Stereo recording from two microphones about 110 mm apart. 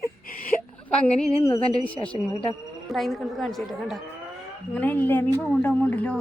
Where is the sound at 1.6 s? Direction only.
60° left (ahead or behind).